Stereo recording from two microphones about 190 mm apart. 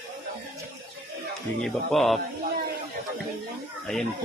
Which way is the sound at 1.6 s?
Centre (ahead or behind).